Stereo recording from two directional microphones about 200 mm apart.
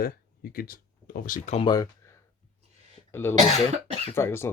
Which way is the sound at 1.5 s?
20° left (ahead or behind).